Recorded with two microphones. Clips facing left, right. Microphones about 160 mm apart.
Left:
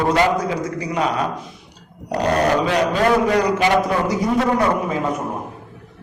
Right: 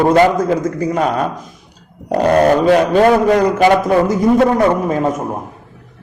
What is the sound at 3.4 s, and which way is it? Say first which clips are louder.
Speech: right 5 dB; 50° right (ahead or behind).